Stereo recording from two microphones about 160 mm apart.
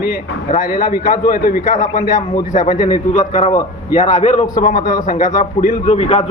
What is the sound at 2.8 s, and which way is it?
Speech, 25° left (ahead or behind).